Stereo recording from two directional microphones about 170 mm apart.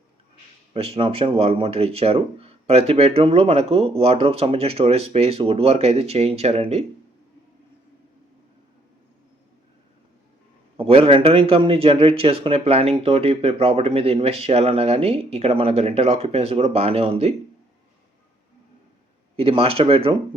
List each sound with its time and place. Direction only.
0.7 s a man's voice: 35° right (ahead or behind)
10.8 s a man's voice: 35° right (ahead or behind)
19.4 s a man's voice: 35° right (ahead or behind)